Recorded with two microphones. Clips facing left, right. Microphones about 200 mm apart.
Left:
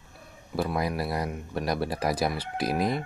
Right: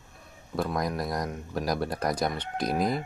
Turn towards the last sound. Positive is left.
turn(degrees=0)  # may be behind; listen again after turning